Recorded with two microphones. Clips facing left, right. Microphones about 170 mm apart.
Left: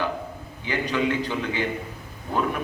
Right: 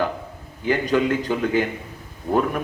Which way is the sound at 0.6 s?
45° right (ahead or behind).